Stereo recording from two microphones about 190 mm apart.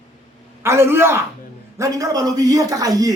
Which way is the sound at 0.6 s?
15° right (ahead or behind).